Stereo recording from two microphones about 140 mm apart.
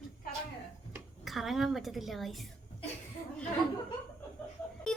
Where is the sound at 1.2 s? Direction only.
Centre (ahead or behind).